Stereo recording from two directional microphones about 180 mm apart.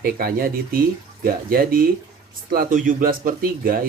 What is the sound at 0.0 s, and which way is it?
Speech, 55° right (ahead or behind).